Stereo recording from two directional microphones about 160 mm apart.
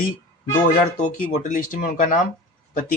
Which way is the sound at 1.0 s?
55° left (ahead or behind).